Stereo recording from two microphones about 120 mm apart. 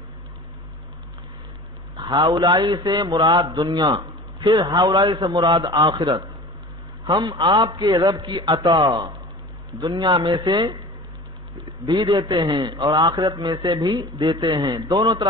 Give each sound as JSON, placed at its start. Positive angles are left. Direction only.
{"t": 2.0, "sound": "a man's voice", "side_deg": -40}
{"t": 11.8, "sound": "a man's voice", "side_deg": -35}